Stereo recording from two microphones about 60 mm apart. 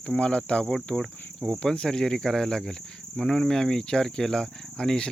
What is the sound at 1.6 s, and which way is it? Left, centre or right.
Cricket, centre.